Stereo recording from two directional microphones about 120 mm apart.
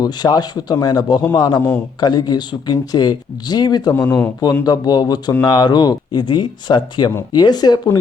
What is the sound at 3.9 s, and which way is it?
Speech, 20° left (ahead or behind).